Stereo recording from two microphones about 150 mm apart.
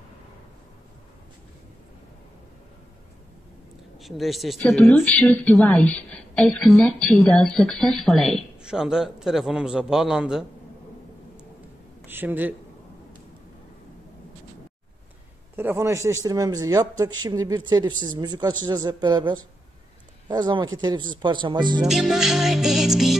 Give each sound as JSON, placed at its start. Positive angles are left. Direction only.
{"t": 4.0, "sound": "a woman's voice", "side_deg": 0}
{"t": 12.1, "sound": "speech", "side_deg": -15}
{"t": 15.5, "sound": "a man's voice", "side_deg": -15}
{"t": 21.8, "sound": "a woman's voice", "side_deg": 0}